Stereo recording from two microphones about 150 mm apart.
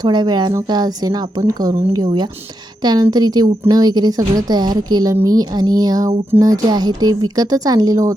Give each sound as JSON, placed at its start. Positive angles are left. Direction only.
{"t": 0.0, "sound": "a woman's voice", "side_deg": -30}